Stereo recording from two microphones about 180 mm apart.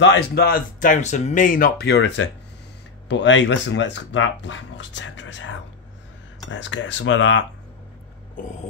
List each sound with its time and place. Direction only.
0.0 s speech: 75° left (ahead or behind)
3.1 s speech: 85° left